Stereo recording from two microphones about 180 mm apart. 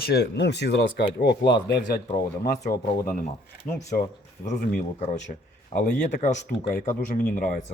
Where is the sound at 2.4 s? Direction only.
55° left (ahead or behind).